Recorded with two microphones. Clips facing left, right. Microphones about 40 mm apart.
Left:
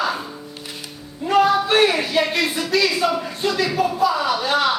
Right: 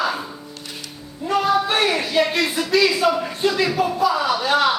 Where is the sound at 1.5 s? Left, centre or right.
Centre.